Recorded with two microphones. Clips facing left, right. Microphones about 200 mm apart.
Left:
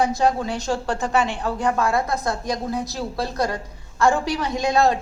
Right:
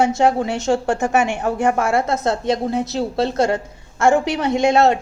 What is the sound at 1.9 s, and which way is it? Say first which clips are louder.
A woman's voice: right 4 dB; 25° right (ahead or behind).